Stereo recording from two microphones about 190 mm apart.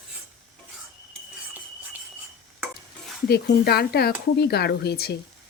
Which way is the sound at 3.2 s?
55° left (ahead or behind).